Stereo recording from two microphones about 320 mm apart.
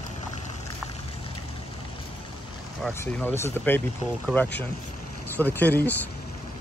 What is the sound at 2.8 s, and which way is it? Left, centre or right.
Speech, centre.